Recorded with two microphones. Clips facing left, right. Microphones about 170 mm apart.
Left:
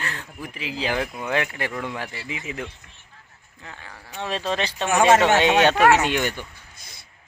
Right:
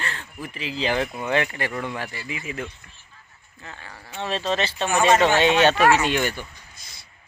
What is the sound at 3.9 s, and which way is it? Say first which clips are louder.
Speech: even; 10° right (ahead or behind).